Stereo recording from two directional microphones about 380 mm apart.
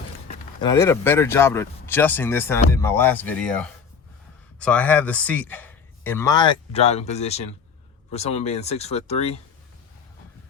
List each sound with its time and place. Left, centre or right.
0.3 s a man's voice: centre